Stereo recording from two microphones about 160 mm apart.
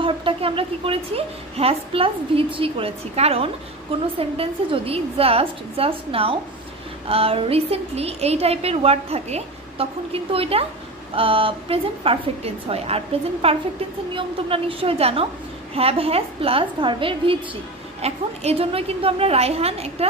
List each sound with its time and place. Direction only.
0.0 s a woman's voice: 35° right (ahead or behind)